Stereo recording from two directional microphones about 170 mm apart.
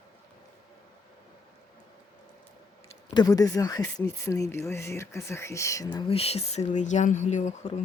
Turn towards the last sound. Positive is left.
turn(degrees=40)  # may be behind; listen again after turning